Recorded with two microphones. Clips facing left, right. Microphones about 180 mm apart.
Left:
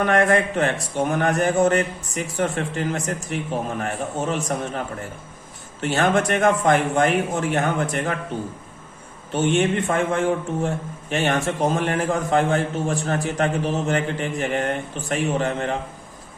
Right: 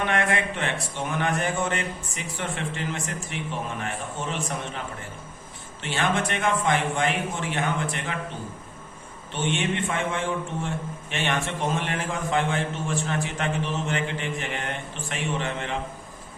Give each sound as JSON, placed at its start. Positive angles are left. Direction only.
{"t": 0.0, "sound": "speech", "side_deg": 40}
{"t": 5.8, "sound": "a man's voice", "side_deg": 45}
{"t": 9.3, "sound": "speech", "side_deg": 40}